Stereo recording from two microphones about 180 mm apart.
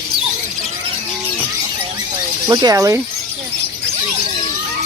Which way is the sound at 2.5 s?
20° right (ahead or behind).